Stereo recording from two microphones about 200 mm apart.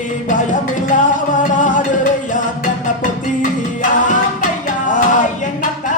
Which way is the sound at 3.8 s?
40° left (ahead or behind).